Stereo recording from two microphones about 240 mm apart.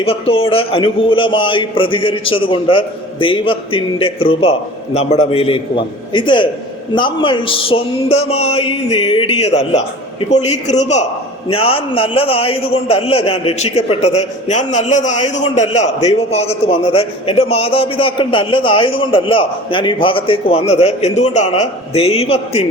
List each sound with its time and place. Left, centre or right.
0.0 s a man's voice: left